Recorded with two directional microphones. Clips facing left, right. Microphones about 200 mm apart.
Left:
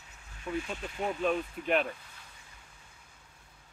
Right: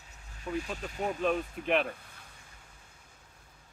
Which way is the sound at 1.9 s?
55° right (ahead or behind).